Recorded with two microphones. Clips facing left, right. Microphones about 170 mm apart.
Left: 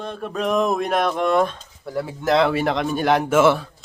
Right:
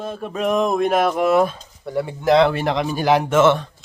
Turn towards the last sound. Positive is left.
turn(degrees=10)  # may be behind; listen again after turning